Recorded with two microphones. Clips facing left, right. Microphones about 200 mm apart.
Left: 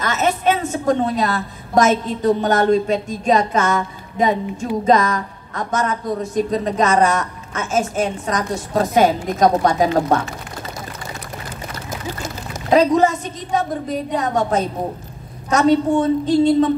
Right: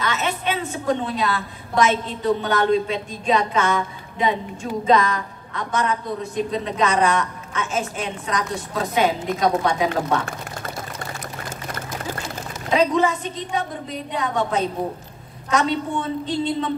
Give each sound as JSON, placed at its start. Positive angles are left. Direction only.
{"t": 0.0, "sound": "a woman's voice", "side_deg": 45}
{"t": 12.6, "sound": "a woman's voice", "side_deg": 45}